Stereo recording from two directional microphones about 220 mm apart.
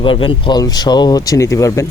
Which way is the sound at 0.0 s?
25° left (ahead or behind).